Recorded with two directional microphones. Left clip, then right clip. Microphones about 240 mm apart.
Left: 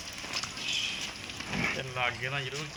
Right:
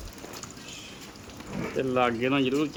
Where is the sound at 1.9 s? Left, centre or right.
Right.